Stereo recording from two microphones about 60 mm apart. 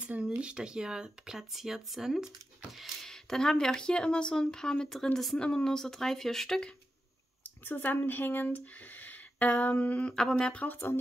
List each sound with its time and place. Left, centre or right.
0.0 s speech: centre
7.6 s speech: left
10.1 s speech: centre
10.7 s speech: left